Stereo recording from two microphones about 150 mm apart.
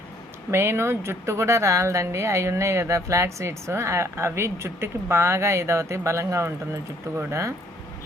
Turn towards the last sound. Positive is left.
turn(degrees=-20)  # may be behind; listen again after turning